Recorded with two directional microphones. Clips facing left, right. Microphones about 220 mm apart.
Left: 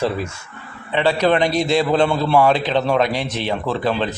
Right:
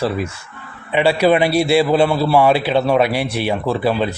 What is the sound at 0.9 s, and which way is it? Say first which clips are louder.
A man's voice: right 3 dB; 10° right (ahead or behind).